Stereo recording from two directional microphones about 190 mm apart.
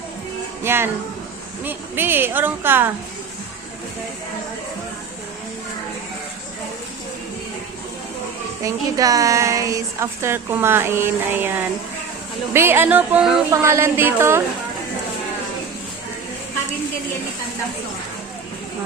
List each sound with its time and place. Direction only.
0.6 s a woman's voice: 10° right (ahead or behind)
8.6 s a woman's voice: 20° right (ahead or behind)